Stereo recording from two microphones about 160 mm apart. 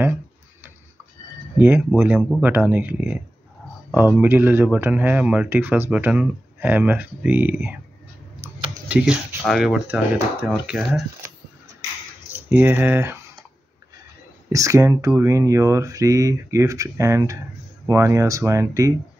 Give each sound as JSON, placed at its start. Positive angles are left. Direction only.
{"t": 2.0, "sound": "speech", "side_deg": -10}
{"t": 8.4, "sound": "computer keyboard", "side_deg": -10}
{"t": 9.5, "sound": "speech", "side_deg": 0}
{"t": 12.4, "sound": "speech", "side_deg": -10}
{"t": 14.5, "sound": "speech", "side_deg": -20}